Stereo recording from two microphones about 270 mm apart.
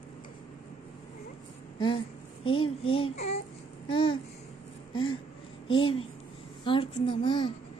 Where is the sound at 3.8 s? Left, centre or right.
Centre.